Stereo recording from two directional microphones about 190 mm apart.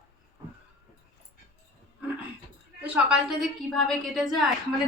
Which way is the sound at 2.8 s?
5° right (ahead or behind).